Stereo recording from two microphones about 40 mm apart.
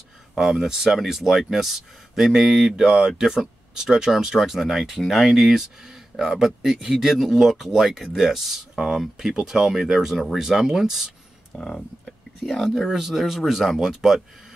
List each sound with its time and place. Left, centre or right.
0.4 s speech: centre
11.5 s speech: left
12.4 s speech: centre